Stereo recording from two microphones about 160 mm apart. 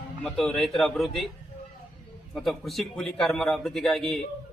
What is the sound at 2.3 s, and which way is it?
Speech, centre (ahead or behind).